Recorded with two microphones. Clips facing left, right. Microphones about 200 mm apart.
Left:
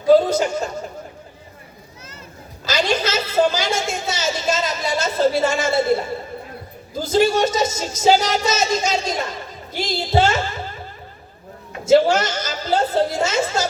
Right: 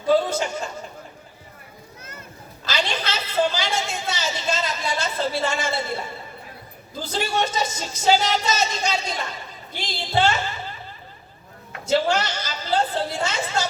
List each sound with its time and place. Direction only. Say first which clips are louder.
0.1 s a woman's voice: left 6 dB; 40° left (ahead or behind)
2.6 s a woman's voice: left 6 dB; 40° left (ahead or behind)
11.9 s a woman's voice: left 7 dB; 45° left (ahead or behind)